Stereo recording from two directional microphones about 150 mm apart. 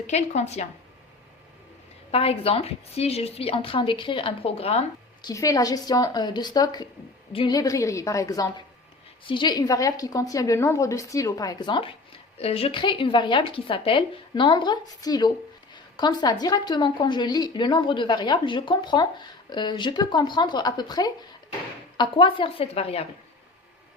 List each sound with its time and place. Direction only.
0.1 s a woman's voice: 50° left (ahead or behind)
2.0 s speech: 40° left (ahead or behind)
5.2 s a woman's voice: 20° left (ahead or behind); by 23.0 s 40° left (ahead or behind)